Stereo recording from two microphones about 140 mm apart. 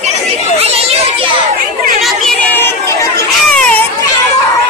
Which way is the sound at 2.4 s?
20° left (ahead or behind).